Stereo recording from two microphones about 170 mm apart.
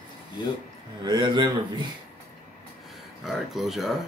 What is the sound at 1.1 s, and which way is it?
Speech, 25° right (ahead or behind).